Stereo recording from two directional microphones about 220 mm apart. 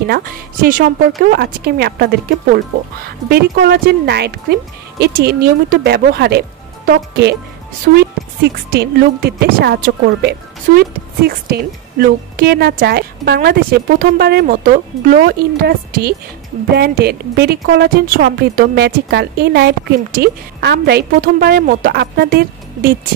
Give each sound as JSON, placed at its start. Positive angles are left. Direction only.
{"t": 0.0, "sound": "a woman's voice", "side_deg": -45}